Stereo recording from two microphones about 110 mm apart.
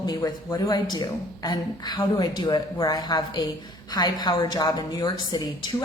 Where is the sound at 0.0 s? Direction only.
35° left (ahead or behind).